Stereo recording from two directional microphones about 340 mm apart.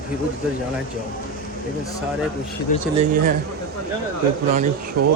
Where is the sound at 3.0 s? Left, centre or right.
Right.